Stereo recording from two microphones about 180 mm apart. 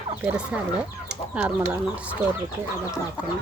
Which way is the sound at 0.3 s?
5° right (ahead or behind).